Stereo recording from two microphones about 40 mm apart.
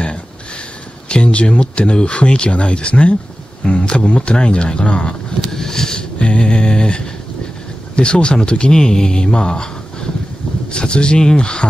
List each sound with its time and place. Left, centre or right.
1.0 s speech: left
5.4 s a sound: centre
6.1 s speech: left